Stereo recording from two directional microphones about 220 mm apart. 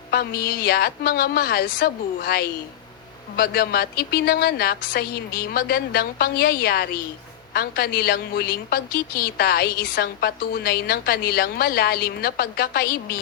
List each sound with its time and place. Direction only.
0.1 s a woman's voice: 45° left (ahead or behind)